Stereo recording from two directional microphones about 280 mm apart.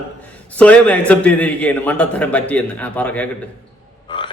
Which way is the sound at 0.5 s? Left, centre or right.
Centre.